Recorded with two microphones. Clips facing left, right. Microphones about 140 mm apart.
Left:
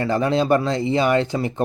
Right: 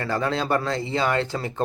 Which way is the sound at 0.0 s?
20° left (ahead or behind).